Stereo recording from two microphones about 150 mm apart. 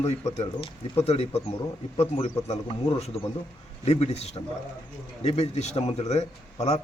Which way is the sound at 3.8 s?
45° left (ahead or behind).